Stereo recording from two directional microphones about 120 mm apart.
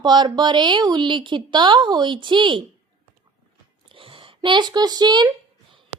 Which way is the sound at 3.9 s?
45° right (ahead or behind).